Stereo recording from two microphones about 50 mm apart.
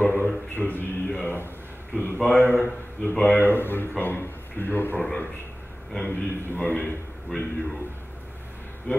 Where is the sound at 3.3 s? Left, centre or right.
Left.